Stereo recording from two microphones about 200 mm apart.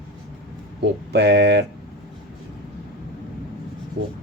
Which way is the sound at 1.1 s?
55° right (ahead or behind).